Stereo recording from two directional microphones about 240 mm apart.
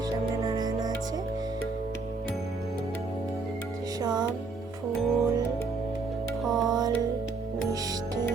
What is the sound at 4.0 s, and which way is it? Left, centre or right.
Music, centre.